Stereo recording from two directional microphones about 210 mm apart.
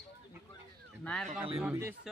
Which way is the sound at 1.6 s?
10° right (ahead or behind).